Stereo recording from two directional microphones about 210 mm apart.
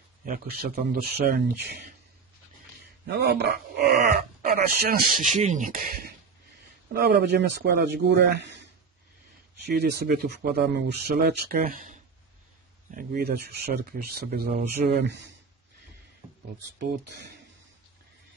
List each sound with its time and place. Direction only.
0.2 s speech: 45° right (ahead or behind)
3.1 s speech: 50° right (ahead or behind)
9.7 s speech: 50° right (ahead or behind)
16.2 s a sound: 15° right (ahead or behind)
16.7 s speech: 55° right (ahead or behind)